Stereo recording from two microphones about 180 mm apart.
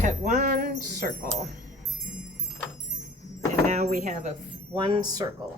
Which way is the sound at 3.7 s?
45° right (ahead or behind).